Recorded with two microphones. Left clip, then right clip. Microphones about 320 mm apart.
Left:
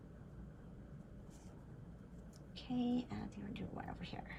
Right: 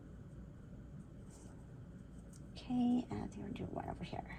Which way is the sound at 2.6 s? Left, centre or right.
Centre.